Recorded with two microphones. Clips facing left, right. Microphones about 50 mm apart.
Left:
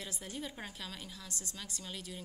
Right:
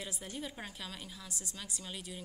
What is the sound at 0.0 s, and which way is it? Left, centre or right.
A woman's voice, centre.